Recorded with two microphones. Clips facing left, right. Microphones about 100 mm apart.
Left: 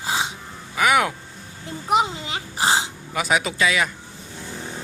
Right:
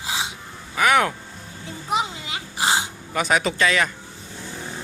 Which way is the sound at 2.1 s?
35° left (ahead or behind).